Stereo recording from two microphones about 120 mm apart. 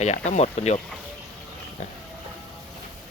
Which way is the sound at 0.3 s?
75° left (ahead or behind).